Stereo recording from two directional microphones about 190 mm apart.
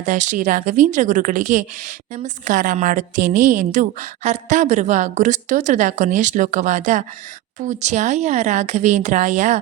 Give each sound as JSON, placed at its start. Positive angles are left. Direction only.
{"t": 0.0, "sound": "a woman's voice", "side_deg": -40}